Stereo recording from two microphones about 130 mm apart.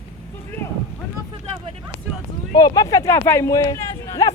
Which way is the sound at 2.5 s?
30° left (ahead or behind).